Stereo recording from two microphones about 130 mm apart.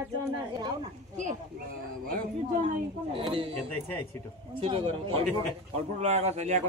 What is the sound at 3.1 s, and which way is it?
Speech, 45° right (ahead or behind).